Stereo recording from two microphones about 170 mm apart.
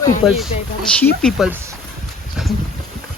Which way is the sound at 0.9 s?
5° left (ahead or behind).